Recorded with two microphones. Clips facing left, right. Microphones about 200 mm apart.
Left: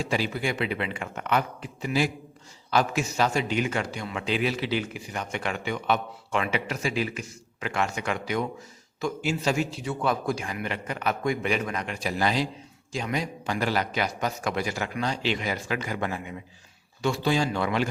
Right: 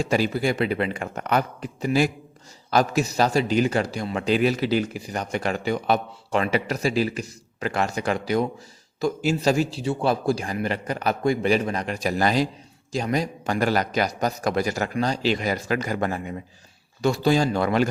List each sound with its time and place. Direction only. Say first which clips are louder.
0.0 s a man's voice: right 5 dB; 45° right (ahead or behind)